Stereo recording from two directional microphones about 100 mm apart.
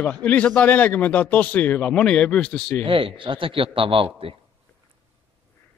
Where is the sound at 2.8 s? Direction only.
60° right (ahead or behind).